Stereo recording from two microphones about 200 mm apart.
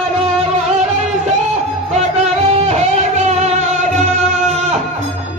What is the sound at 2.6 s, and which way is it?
Music, 35° right (ahead or behind).